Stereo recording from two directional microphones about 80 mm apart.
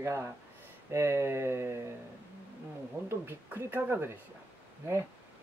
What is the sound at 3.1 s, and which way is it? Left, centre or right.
Speech, right.